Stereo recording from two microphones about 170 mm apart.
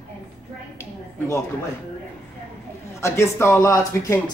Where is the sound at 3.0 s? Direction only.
15° left (ahead or behind).